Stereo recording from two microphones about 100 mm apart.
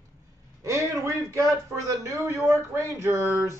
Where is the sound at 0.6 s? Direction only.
30° right (ahead or behind).